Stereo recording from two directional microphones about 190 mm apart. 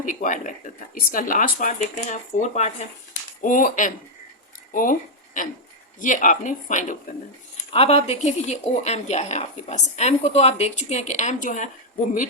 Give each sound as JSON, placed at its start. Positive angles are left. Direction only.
{"t": 0.0, "sound": "speech", "side_deg": 45}
{"t": 4.7, "sound": "a sound", "side_deg": 45}
{"t": 6.0, "sound": "a woman's voice", "side_deg": 45}